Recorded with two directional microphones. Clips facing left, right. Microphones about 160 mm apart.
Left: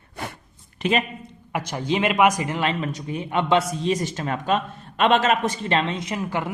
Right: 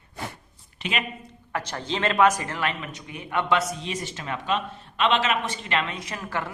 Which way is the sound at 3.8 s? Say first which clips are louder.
Left 8 dB; 40° left (ahead or behind).